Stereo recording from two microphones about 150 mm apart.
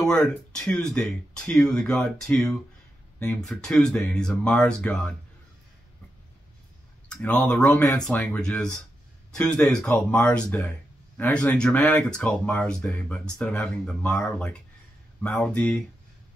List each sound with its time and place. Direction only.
0.0 s speech: 5° left (ahead or behind)
7.1 s speech: 10° left (ahead or behind)